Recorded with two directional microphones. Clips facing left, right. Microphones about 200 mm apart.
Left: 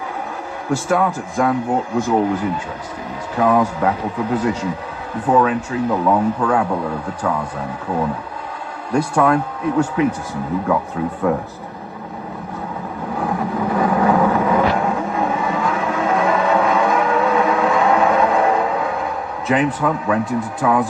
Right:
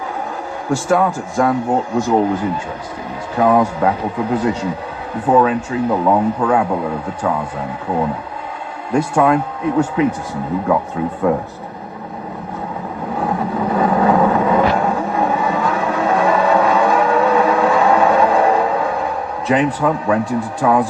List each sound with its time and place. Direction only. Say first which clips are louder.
0.7 s speech: right 2 dB; 35° right (ahead or behind)
3.3 s speech: right 2 dB; 25° right (ahead or behind)
5.3 s speech: right 2 dB; 25° right (ahead or behind)
8.9 s speech: right 2 dB; 20° right (ahead or behind)
11.3 s speech: right 2 dB; 20° right (ahead or behind)
13.1 s vehicle: right 2 dB; 25° right (ahead or behind)
19.5 s speech: right 2 dB; 30° right (ahead or behind)